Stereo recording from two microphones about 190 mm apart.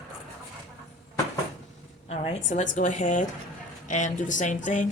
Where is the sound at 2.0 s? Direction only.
35° left (ahead or behind).